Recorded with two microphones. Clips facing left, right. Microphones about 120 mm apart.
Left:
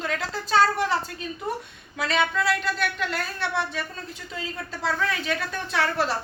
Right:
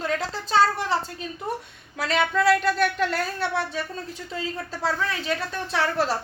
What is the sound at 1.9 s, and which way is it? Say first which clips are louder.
Speech: right 1 dB; 40° right (ahead or behind).